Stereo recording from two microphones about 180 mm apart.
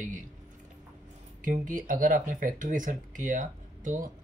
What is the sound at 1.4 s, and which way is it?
Speech, 45° right (ahead or behind).